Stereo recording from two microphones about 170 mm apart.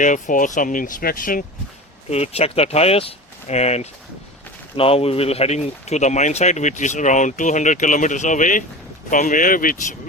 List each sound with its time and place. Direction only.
0.0 s speech: 50° left (ahead or behind)
2.0 s speech: 40° left (ahead or behind); by 9.7 s 55° left (ahead or behind)